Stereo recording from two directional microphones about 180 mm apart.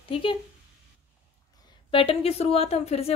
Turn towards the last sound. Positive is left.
turn(degrees=35)  # may be behind; listen again after turning